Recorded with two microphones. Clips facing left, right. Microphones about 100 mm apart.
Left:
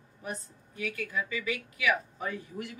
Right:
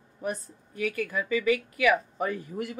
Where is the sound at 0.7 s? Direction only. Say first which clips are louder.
Right 5 dB; 55° right (ahead or behind).